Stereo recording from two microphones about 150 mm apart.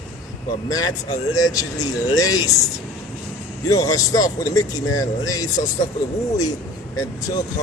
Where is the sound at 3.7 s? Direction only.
25° left (ahead or behind).